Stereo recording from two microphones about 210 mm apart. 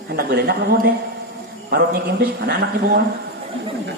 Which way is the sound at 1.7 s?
50° right (ahead or behind).